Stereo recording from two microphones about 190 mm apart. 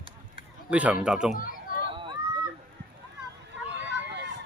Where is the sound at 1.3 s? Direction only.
50° left (ahead or behind).